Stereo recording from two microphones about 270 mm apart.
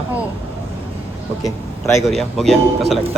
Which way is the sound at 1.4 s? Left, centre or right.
Centre.